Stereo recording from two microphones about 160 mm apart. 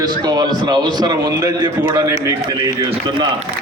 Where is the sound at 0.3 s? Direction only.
25° right (ahead or behind).